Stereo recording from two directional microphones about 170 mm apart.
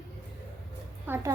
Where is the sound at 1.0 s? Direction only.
15° right (ahead or behind).